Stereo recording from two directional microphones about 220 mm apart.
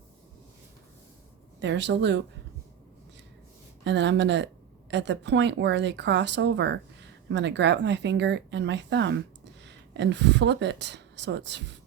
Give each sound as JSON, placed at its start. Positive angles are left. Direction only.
{"t": 1.5, "sound": "speech", "side_deg": -55}
{"t": 3.8, "sound": "speech", "side_deg": -55}